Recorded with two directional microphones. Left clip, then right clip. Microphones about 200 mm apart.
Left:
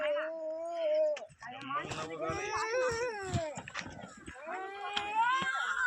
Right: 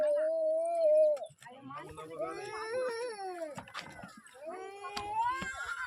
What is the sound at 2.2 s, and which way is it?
Baby cry, 65° right (ahead or behind).